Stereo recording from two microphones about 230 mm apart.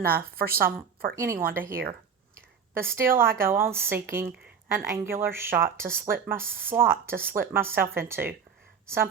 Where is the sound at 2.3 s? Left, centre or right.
Centre.